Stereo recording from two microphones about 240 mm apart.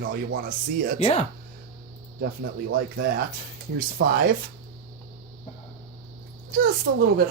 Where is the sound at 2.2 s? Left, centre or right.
Right.